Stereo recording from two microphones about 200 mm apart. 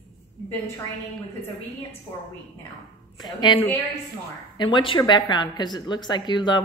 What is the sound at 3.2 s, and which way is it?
Speech, 20° left (ahead or behind).